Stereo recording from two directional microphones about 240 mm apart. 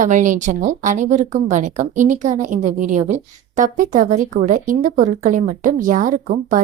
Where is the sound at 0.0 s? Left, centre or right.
Right.